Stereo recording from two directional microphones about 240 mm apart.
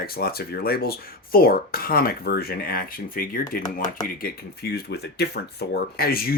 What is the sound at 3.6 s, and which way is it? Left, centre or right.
Speech, centre.